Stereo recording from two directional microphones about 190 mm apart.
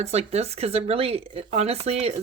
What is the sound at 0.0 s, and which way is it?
Speech, 35° right (ahead or behind).